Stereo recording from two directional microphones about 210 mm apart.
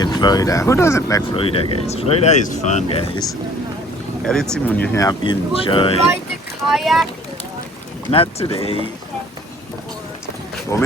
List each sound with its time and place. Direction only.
0.0 s speech: 20° left (ahead or behind)
4.2 s speech: 5° left (ahead or behind); by 6.0 s 25° left (ahead or behind)
6.7 s speech: centre (ahead or behind)
8.1 s speech: 25° left (ahead or behind)
10.7 s speech: 15° left (ahead or behind)